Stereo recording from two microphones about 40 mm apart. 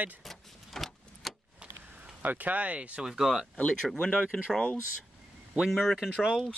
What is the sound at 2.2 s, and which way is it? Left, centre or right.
Speech, right.